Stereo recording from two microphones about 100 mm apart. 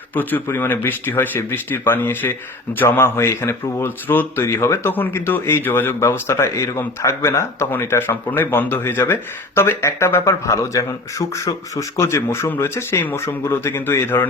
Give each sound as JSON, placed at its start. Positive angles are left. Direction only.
{"t": 0.1, "sound": "speech", "side_deg": 20}